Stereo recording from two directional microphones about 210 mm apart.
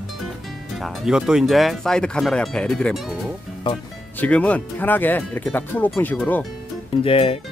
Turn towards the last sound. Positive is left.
turn(degrees=25)  # may be behind; listen again after turning